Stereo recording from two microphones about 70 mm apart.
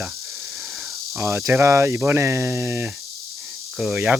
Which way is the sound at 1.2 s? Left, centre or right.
Right.